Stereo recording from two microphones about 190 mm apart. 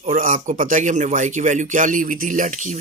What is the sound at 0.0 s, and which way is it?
Speech, 45° right (ahead or behind).